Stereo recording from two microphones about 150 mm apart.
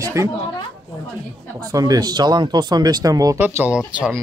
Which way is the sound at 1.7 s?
25° right (ahead or behind).